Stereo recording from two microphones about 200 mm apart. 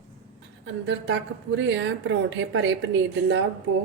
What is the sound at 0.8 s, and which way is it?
A woman's voice, 70° right (ahead or behind).